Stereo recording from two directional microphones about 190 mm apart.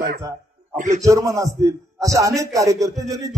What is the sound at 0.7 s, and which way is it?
Speech, 40° right (ahead or behind).